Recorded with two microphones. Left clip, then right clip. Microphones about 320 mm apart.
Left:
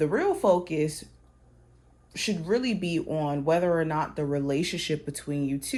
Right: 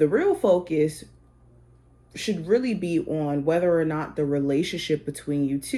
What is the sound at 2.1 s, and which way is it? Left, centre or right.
Speech, left.